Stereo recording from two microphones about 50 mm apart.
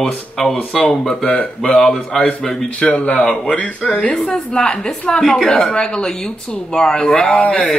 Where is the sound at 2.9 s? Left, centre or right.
Left.